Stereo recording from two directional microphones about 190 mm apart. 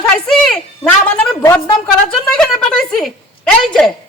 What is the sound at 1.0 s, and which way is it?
Speech, 5° left (ahead or behind).